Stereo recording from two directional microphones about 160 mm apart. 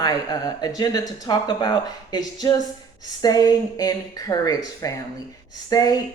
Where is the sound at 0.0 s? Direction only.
25° left (ahead or behind).